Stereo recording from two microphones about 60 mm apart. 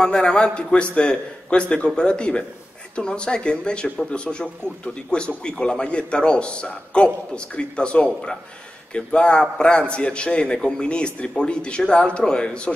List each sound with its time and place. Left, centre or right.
0.0 s speech: centre